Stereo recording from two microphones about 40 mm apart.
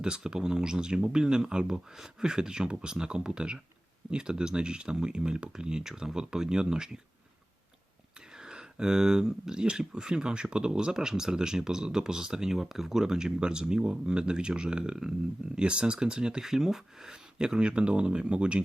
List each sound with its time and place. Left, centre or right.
0.0 s speech: centre
8.4 s speech: centre